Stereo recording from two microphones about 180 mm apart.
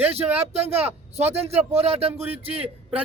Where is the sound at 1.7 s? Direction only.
35° right (ahead or behind).